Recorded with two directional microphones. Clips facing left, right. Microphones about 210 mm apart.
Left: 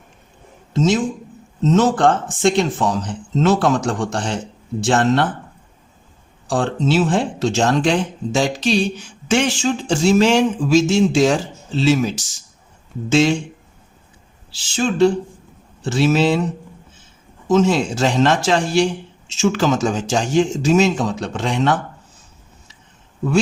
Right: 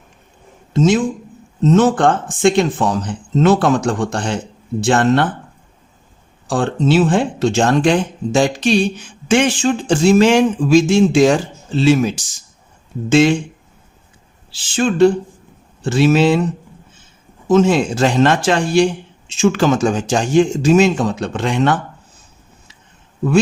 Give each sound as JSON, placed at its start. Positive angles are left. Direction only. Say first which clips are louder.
{"t": 0.7, "sound": "speech", "louder": "right 3 dB", "side_deg": -55}
{"t": 6.5, "sound": "speech", "louder": "right 3 dB", "side_deg": -55}
{"t": 14.5, "sound": "speech", "louder": "right 3 dB", "side_deg": -55}
{"t": 17.5, "sound": "speech", "louder": "right 3 dB", "side_deg": -55}